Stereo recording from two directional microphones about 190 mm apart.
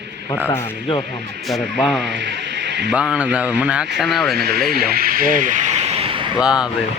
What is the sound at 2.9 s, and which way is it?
Speech, 5° right (ahead or behind).